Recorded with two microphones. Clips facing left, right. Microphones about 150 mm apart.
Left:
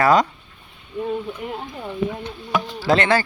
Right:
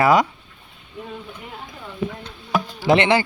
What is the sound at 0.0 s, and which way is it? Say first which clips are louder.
Speech: even; 10° right (ahead or behind).